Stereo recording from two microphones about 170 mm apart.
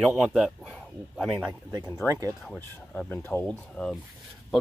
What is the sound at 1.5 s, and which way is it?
Speech, 25° right (ahead or behind).